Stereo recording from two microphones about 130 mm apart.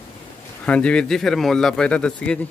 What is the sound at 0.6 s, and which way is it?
Speech, 10° left (ahead or behind).